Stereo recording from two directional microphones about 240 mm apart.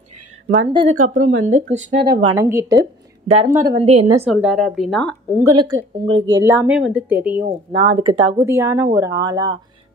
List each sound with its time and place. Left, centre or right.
0.9 s a woman's voice: right
1.4 s speech: right
1.9 s speech: right
2.3 s a woman's voice: centre
3.3 s speech: right
4.3 s a woman's voice: centre
5.5 s a woman's voice: centre
7.7 s a woman's voice: right